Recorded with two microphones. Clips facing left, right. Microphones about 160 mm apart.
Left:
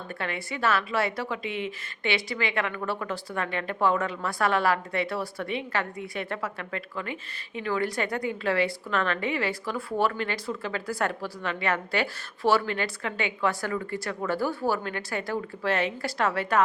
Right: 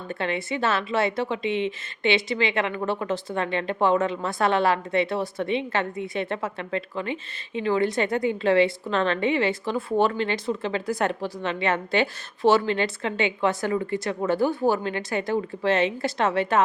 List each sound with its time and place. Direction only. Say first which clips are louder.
0.1 s a woman's voice: right 7 dB; 25° right (ahead or behind)